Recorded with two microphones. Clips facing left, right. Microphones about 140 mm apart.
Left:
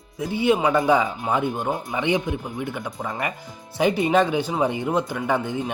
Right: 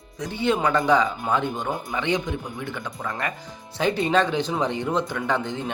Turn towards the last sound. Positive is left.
turn(degrees=10)  # may be behind; listen again after turning